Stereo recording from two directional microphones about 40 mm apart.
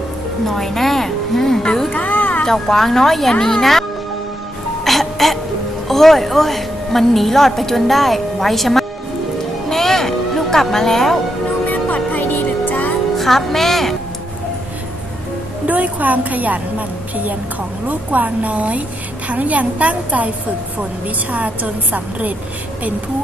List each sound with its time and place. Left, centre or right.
0.4 s a woman's voice: centre
1.9 s a sound: left
2.4 s a woman's voice: centre
4.8 s music: centre
5.9 s a woman's voice: centre
9.6 s music: centre
11.6 s music: left
13.1 s speech: centre
15.6 s a woman's voice: right
17.8 s a woman's voice: right